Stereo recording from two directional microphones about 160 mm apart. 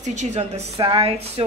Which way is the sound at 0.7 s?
35° right (ahead or behind).